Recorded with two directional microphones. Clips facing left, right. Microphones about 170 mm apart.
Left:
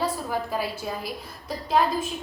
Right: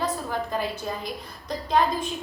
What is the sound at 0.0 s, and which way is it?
A woman's voice, 5° left (ahead or behind).